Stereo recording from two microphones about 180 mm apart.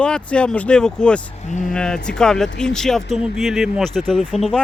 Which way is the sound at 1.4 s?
45° left (ahead or behind).